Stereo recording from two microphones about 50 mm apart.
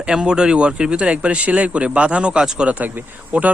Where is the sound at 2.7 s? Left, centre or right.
Right.